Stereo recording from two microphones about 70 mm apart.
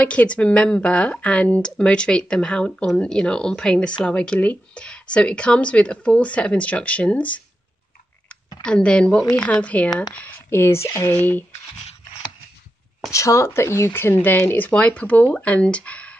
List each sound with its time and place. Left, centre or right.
0.0 s speech: centre
8.6 s speech: centre
10.1 s speech: left
11.1 s speech: left
13.1 s speech: left; by 16.2 s centre